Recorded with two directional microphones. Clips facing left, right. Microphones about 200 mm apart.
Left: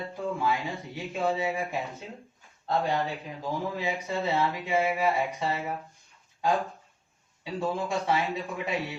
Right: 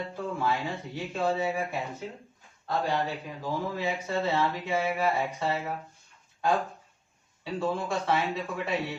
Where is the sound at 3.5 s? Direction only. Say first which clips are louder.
Even; 15° left (ahead or behind).